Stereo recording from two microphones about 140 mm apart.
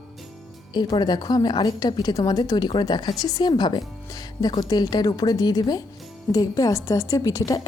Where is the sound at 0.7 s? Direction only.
30° left (ahead or behind).